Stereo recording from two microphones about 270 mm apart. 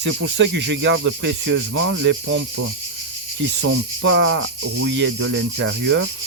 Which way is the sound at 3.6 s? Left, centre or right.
Right.